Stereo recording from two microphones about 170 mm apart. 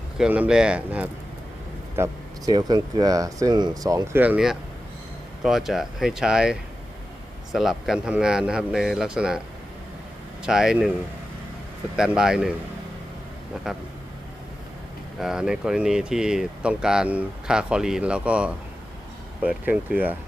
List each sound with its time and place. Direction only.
0.2 s speech: 5° right (ahead or behind)
2.5 s speech: 25° right (ahead or behind); by 9.4 s 5° right (ahead or behind)
10.4 s speech: 5° right (ahead or behind)
11.9 s speech: 5° right (ahead or behind)
15.2 s speech: 5° right (ahead or behind)